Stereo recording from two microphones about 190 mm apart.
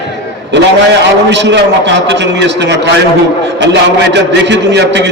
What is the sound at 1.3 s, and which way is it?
A man's voice, 70° right (ahead or behind).